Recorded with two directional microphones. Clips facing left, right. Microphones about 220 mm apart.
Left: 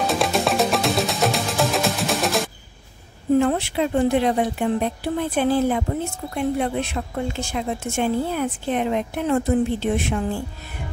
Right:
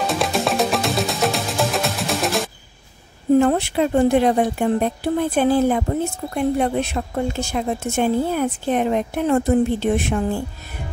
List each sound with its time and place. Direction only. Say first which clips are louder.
0.0 s music: even; centre (ahead or behind)
3.3 s a woman's voice: right 3 dB; 45° right (ahead or behind)